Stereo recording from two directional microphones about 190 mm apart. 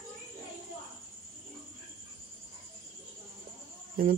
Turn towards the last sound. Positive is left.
turn(degrees=-50)  # may be behind; listen again after turning